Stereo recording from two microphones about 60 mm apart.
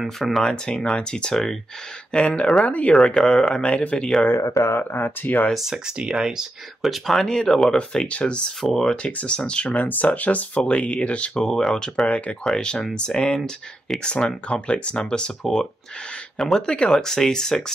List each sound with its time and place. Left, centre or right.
0.0 s speech: centre
0.4 s speech: centre
2.1 s speech: centre
2.9 s speech: centre
4.4 s speech: left
4.7 s speech: left
5.5 s speech: centre
8.5 s speech: centre
8.9 s speech: centre
11.3 s speech: centre